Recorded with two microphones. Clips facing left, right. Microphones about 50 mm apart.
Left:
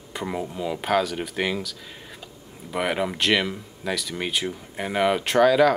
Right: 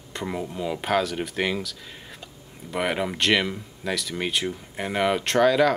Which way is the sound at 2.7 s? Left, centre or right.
Centre.